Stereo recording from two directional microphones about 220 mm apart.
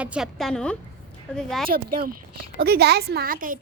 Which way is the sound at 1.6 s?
40° right (ahead or behind).